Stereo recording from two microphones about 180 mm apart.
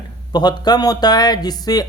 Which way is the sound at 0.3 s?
20° left (ahead or behind).